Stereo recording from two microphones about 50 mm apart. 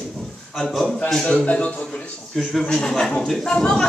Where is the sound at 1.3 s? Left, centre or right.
Left.